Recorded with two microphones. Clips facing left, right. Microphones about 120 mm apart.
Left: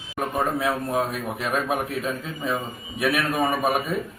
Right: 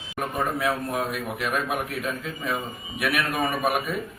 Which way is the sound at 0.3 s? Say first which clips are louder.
Left 2 dB; 30° left (ahead or behind).